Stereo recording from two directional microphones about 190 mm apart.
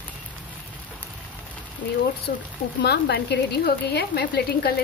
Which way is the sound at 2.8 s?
60° left (ahead or behind).